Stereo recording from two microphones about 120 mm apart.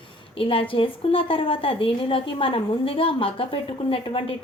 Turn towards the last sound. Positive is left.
turn(degrees=45)  # may be behind; listen again after turning